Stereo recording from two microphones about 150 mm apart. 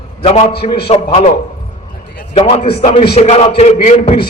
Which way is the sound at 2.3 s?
40° left (ahead or behind).